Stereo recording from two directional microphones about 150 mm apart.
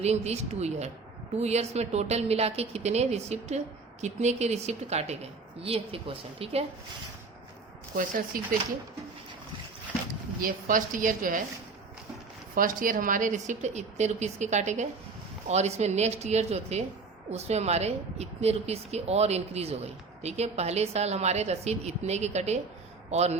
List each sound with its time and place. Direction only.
0.0 s speech: 45° right (ahead or behind)
7.9 s speech: 65° right (ahead or behind)
10.4 s a woman's voice: 65° right (ahead or behind)
12.5 s speech: 65° right (ahead or behind); by 23.4 s 45° right (ahead or behind)